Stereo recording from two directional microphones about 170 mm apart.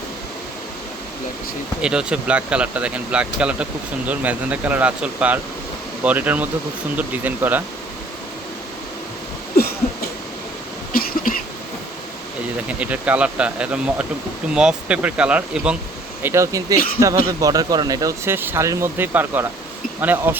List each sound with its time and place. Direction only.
1.8 s speech: 5° right (ahead or behind)
10.9 s cough: 55° left (ahead or behind)
12.6 s speech: 10° right (ahead or behind)
16.2 s speech: 15° right (ahead or behind)